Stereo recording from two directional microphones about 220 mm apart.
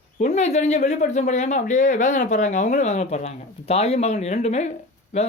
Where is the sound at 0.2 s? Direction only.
30° left (ahead or behind).